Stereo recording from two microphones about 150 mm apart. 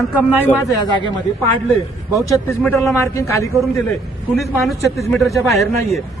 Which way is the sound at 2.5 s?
15° left (ahead or behind).